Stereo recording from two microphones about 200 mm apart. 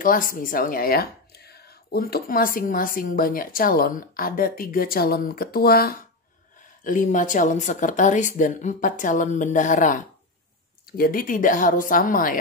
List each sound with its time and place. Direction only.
0.0 s speech: 45° left (ahead or behind)